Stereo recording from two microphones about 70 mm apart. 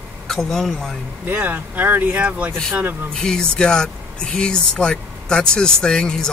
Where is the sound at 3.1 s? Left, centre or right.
Centre.